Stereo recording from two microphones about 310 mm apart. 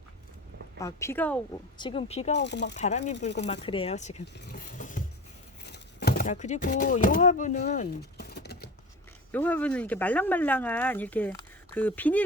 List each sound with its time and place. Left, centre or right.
0.8 s speech: centre
1.8 s speech: centre
2.4 s speech: left
2.7 s speech: left
9.3 s speech: centre